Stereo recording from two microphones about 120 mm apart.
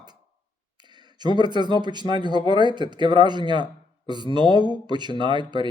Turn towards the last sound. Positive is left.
turn(degrees=-40)  # may be behind; listen again after turning